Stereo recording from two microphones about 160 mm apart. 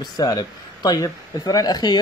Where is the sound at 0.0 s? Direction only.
25° left (ahead or behind).